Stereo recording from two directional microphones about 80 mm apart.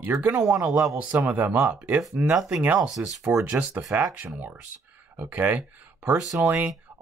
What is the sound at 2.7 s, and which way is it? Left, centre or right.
Speech, centre.